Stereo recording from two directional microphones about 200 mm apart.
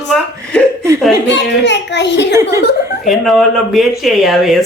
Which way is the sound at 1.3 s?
60° left (ahead or behind).